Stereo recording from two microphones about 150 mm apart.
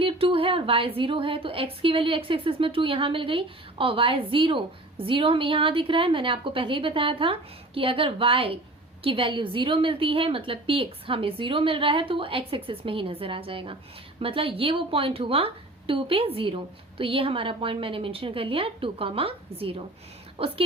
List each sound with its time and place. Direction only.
0.0 s a woman's voice: 40° right (ahead or behind)